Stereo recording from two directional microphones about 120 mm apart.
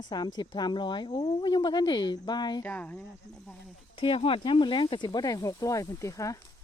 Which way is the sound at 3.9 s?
50° left (ahead or behind).